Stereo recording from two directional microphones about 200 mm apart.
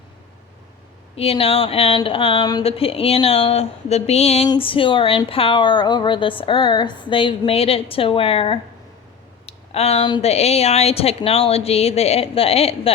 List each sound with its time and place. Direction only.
1.1 s a woman's voice: 30° left (ahead or behind)